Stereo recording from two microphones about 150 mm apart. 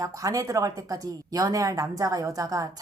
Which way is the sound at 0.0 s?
20° right (ahead or behind).